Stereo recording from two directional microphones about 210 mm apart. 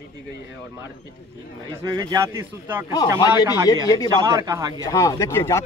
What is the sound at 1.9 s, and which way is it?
A man's voice, 15° right (ahead or behind).